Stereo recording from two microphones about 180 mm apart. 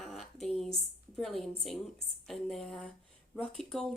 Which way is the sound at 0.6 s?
Centre (ahead or behind).